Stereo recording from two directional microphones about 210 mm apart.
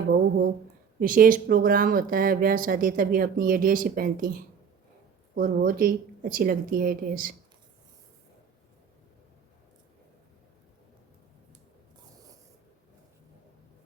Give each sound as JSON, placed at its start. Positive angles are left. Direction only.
{"t": 0.9, "sound": "speech", "side_deg": -40}
{"t": 5.3, "sound": "a woman's voice", "side_deg": -45}